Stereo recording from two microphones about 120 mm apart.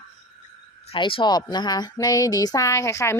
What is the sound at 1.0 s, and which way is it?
A woman's voice, 45° left (ahead or behind).